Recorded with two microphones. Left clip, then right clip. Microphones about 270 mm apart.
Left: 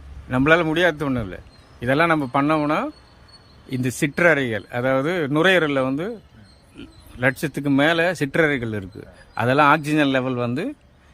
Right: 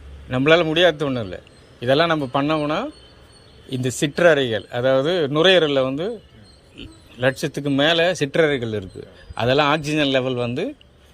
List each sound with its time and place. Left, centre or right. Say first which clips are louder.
0.3 s speech: right 1 dB; centre